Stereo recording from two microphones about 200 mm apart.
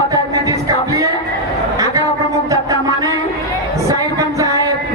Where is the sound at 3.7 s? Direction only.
15° right (ahead or behind).